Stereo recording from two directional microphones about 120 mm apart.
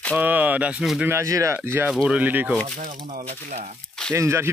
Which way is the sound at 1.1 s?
25° right (ahead or behind).